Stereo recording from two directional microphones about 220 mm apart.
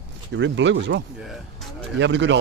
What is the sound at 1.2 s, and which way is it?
Speech, centre (ahead or behind).